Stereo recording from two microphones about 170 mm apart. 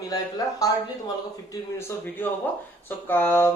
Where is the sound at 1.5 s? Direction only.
15° left (ahead or behind).